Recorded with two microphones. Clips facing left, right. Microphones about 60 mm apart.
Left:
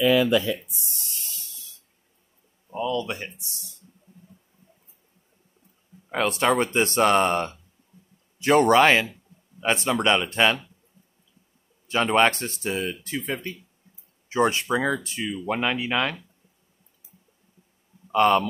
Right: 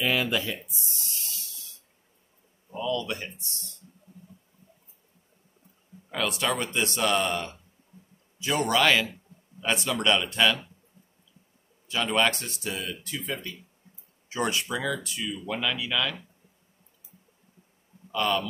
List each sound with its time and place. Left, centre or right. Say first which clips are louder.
2.7 s speech: left 3 dB; left
6.1 s speech: left 6 dB; left
11.9 s speech: left 5 dB; left
18.1 s speech: left 8 dB; left